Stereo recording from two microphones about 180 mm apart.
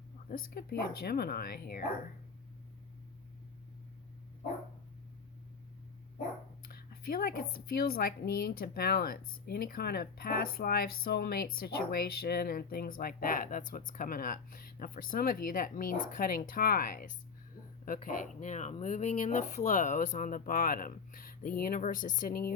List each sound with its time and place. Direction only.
0.3 s a woman's voice: 55° left (ahead or behind)
6.6 s a woman's voice: 55° left (ahead or behind)